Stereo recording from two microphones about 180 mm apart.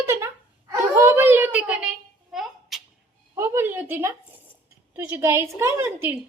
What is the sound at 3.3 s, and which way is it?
A woman's voice, 15° right (ahead or behind).